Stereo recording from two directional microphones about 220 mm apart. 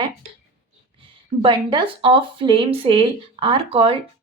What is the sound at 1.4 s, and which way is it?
Speech, 20° right (ahead or behind).